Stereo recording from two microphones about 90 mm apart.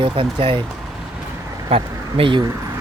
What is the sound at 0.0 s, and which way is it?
Speech, 75° right (ahead or behind).